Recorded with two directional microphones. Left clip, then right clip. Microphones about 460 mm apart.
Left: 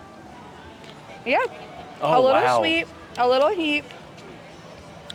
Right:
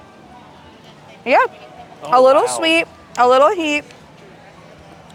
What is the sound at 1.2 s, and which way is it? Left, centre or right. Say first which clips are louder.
Speech: right 8 dB; right.